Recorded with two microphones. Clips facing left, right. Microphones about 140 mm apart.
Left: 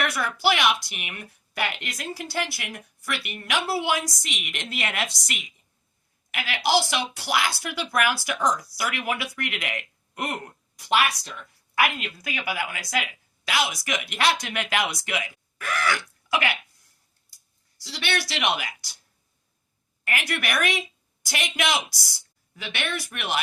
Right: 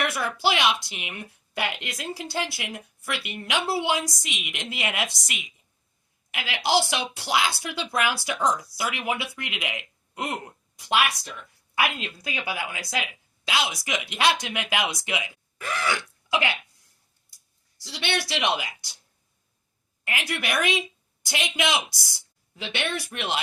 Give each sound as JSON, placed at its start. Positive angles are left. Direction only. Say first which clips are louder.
{"t": 0.0, "sound": "a woman's voice", "louder": "left 1 dB", "side_deg": -20}
{"t": 17.8, "sound": "a woman's voice", "louder": "even", "side_deg": -20}
{"t": 20.1, "sound": "a woman's voice", "louder": "left 1 dB", "side_deg": -20}